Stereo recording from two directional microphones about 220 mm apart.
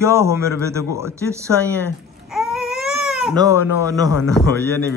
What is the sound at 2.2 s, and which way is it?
Baby cry, centre (ahead or behind).